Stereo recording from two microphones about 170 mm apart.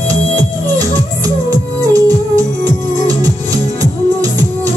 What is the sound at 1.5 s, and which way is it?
Music, 20° right (ahead or behind).